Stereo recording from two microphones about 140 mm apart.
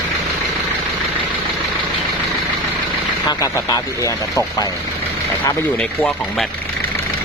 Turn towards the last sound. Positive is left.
turn(degrees=10)  # may be behind; listen again after turning